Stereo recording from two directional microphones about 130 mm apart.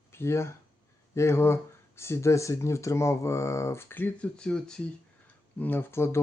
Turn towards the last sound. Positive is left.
turn(degrees=20)  # may be behind; listen again after turning